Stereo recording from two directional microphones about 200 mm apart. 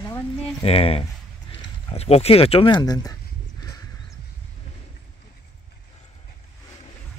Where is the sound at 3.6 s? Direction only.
20° left (ahead or behind).